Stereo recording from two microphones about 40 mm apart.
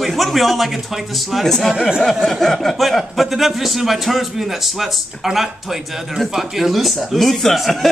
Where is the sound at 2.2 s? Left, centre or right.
Centre.